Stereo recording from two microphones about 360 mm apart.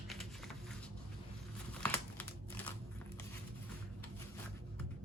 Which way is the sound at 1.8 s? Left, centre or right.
Centre.